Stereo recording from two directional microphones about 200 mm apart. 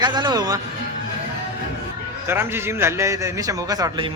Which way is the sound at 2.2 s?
10° right (ahead or behind).